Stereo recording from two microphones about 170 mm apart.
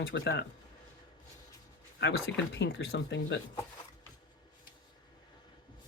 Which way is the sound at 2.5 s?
90° left.